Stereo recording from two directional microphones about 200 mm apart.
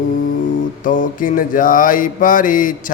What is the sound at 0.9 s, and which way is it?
Mantra, 40° left (ahead or behind).